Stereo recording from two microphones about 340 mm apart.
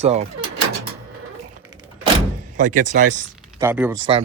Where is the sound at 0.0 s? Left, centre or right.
Centre.